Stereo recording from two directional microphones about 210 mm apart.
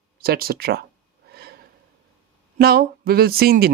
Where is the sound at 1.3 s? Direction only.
50° right (ahead or behind).